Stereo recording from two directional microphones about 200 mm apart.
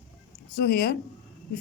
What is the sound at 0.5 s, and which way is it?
Speech, 50° left (ahead or behind).